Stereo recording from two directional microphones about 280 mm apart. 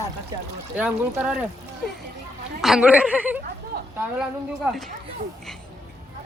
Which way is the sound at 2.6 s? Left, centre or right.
Centre.